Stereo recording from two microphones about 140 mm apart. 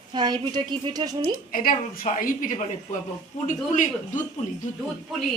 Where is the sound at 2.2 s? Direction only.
70° left (ahead or behind).